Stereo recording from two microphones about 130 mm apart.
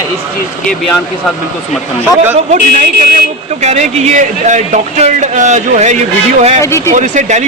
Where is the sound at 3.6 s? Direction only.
60° right (ahead or behind).